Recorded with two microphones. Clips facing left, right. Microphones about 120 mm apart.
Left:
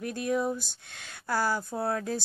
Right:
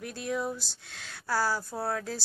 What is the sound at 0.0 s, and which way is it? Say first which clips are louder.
Speech: left 4 dB; 40° left (ahead or behind).